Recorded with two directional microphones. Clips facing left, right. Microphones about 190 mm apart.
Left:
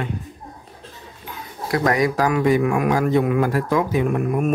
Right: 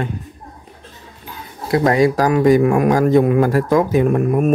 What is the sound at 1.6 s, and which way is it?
Speech, 25° right (ahead or behind).